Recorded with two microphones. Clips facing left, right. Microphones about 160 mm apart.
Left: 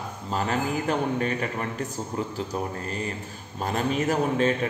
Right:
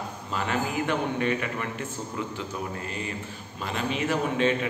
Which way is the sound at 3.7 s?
45° left (ahead or behind).